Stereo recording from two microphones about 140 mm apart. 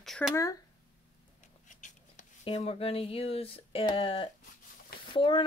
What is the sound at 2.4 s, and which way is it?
Speech, 45° left (ahead or behind).